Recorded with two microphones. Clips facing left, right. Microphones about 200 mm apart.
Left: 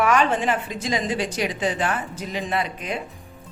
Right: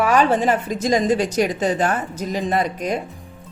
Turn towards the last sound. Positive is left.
turn(degrees=-40)  # may be behind; listen again after turning